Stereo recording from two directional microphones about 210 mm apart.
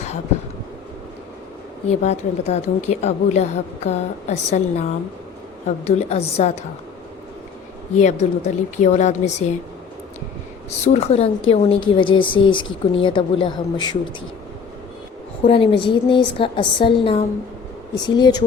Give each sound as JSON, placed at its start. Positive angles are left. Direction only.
{"t": 1.9, "sound": "a woman's voice", "side_deg": 30}
{"t": 7.9, "sound": "a woman's voice", "side_deg": 30}
{"t": 10.7, "sound": "a woman's voice", "side_deg": 30}
{"t": 15.4, "sound": "a woman's voice", "side_deg": 25}